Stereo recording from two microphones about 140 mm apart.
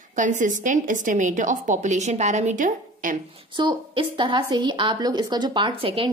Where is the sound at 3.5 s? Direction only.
35° right (ahead or behind).